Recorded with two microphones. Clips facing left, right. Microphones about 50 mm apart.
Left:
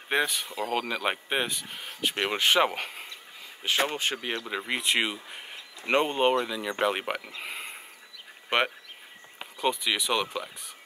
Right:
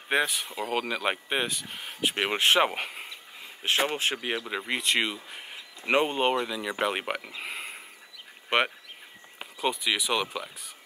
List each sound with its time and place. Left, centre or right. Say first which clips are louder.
0.1 s speech: right 1 dB; centre
2.3 s speech: right 1 dB; right
2.6 s speech: even; centre
3.8 s speech: right 1 dB; right
4.2 s speech: right 1 dB; centre